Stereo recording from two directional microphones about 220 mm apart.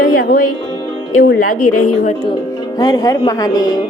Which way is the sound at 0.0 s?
40° left (ahead or behind).